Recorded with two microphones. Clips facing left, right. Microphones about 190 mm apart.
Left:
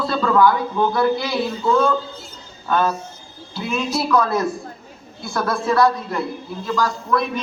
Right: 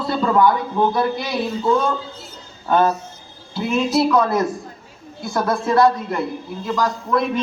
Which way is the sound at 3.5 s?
25° right (ahead or behind).